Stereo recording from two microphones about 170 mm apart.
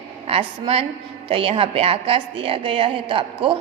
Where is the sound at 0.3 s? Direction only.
35° right (ahead or behind).